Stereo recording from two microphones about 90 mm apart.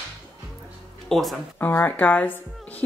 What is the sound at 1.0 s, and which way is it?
Speech, centre (ahead or behind).